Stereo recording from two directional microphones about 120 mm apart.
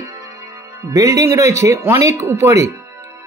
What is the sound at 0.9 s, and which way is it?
Speech, 30° right (ahead or behind).